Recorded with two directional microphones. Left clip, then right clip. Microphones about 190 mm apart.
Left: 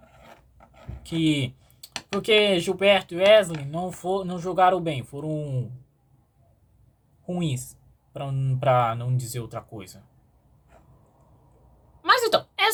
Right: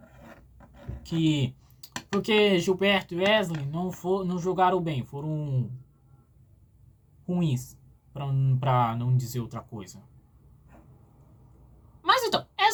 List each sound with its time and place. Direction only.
1.1 s speech: 30° left (ahead or behind)
2.5 s speech: 25° left (ahead or behind)
7.3 s a woman's voice: 30° left (ahead or behind)
12.0 s a sound: 25° left (ahead or behind)